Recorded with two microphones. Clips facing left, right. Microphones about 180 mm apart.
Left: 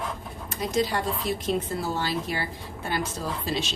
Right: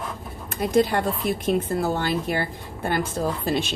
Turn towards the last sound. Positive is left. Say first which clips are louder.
# right 5 dB
turn(degrees=-55)  # may be behind; listen again after turning